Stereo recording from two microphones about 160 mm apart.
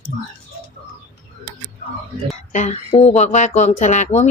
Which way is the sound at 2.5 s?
45° left (ahead or behind).